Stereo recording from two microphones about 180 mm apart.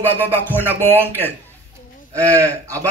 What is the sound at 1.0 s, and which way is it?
Speech, 10° left (ahead or behind).